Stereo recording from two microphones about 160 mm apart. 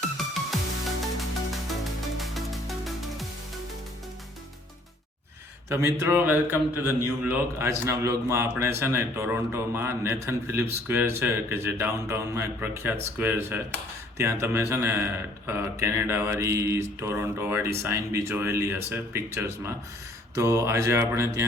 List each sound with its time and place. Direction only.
0.5 s music: centre (ahead or behind)
2.1 s music: centre (ahead or behind)
5.6 s a man's voice: 15° right (ahead or behind)